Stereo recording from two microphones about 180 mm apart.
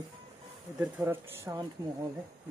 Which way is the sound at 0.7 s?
10° right (ahead or behind).